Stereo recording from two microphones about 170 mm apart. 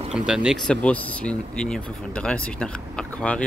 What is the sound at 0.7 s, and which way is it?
Speech, 5° left (ahead or behind).